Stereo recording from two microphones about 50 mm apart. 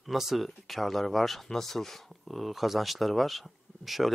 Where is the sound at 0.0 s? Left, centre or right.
Centre.